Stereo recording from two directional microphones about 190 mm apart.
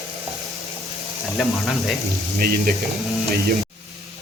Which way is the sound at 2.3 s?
50° right (ahead or behind).